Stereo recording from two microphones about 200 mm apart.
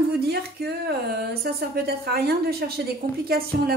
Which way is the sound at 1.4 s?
50° right (ahead or behind).